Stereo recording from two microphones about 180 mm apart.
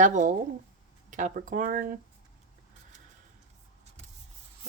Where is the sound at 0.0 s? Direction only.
45° right (ahead or behind).